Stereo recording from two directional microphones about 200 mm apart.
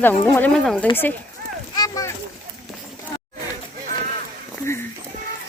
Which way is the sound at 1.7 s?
20° left (ahead or behind).